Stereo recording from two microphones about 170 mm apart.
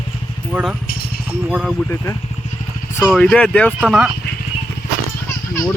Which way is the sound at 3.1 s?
5° left (ahead or behind).